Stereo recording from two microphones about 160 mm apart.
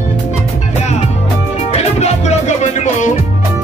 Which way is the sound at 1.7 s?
45° left (ahead or behind).